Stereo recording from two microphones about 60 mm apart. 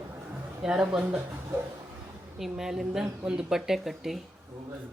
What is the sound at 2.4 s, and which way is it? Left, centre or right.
Speech, centre.